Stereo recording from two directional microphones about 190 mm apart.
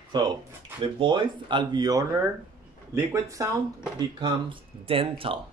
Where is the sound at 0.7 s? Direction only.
25° right (ahead or behind).